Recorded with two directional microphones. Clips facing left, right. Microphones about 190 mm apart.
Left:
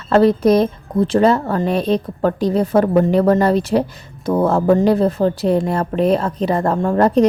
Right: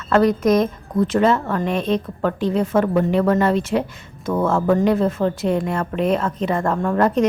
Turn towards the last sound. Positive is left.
turn(degrees=30)  # may be behind; listen again after turning